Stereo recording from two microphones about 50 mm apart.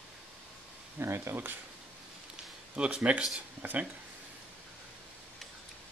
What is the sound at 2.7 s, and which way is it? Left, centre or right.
Speech, right.